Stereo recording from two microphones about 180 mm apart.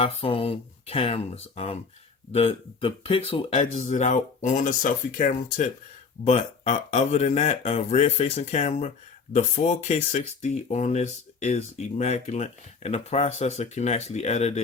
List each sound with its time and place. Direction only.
0.0 s speech: 30° left (ahead or behind)